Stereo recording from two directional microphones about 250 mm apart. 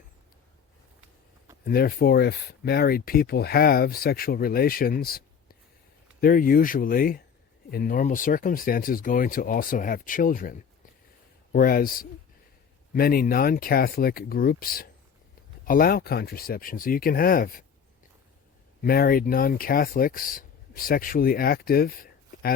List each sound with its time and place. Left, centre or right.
1.6 s speech: left
18.8 s speech: left